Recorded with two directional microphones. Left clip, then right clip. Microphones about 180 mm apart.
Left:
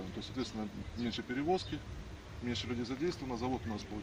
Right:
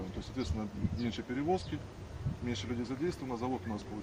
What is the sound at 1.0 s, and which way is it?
Speech, 15° right (ahead or behind).